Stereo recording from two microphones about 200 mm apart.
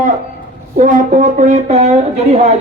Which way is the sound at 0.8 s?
40° right (ahead or behind).